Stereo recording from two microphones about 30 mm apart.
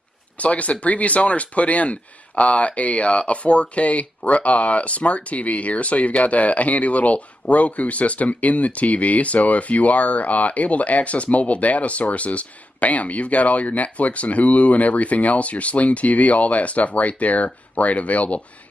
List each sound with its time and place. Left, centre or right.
0.4 s speech: left